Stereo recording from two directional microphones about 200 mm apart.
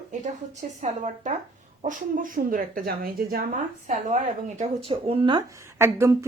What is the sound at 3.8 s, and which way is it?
A woman's voice, 35° right (ahead or behind).